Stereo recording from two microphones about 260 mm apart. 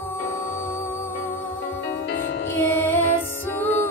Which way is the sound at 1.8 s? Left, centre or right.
Left.